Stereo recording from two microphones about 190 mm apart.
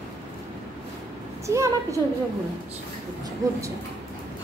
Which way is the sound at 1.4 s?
15° right (ahead or behind).